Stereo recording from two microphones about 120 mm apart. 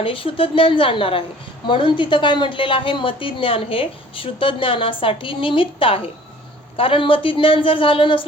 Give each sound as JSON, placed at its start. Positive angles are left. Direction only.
{"t": 0.0, "sound": "a woman's voice", "side_deg": 50}